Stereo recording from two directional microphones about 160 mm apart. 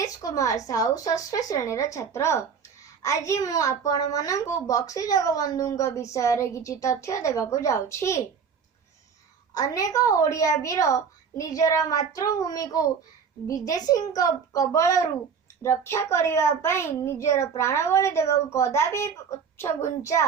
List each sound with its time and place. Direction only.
0.0 s a woman's voice: 20° left (ahead or behind)
9.6 s a woman's voice: 20° left (ahead or behind)